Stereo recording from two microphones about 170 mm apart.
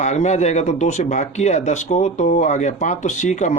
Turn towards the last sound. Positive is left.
turn(degrees=45)  # may be behind; listen again after turning